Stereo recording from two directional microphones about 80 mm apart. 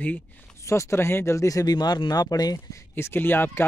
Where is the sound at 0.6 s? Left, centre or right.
Left.